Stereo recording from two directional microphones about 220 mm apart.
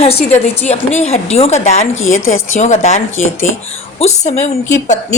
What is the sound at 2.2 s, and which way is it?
Speech, 65° left (ahead or behind).